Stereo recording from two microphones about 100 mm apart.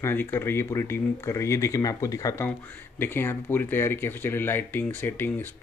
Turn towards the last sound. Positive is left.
turn(degrees=20)  # may be behind; listen again after turning